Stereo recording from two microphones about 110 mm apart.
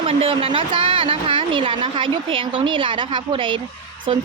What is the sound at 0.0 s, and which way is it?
Speech, 60° right (ahead or behind).